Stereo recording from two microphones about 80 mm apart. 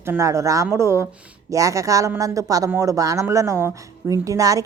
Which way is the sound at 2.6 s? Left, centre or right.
Right.